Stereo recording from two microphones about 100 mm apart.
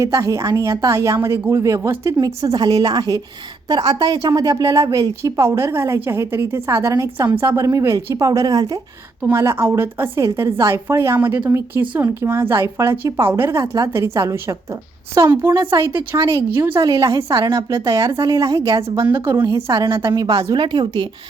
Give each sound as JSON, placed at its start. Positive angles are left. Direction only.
{"t": 0.0, "sound": "a woman's voice", "side_deg": -35}
{"t": 9.3, "sound": "speech", "side_deg": -30}
{"t": 10.2, "sound": "speech", "side_deg": -35}
{"t": 15.3, "sound": "a woman's voice", "side_deg": -25}
{"t": 19.0, "sound": "speech", "side_deg": -25}
{"t": 19.6, "sound": "a woman's voice", "side_deg": -40}